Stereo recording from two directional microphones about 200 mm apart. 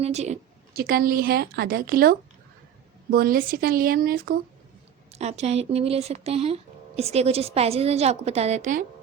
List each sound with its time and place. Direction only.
0.0 s speech: 35° right (ahead or behind)
0.7 s a woman's voice: 50° right (ahead or behind)
5.1 s speech: 35° right (ahead or behind)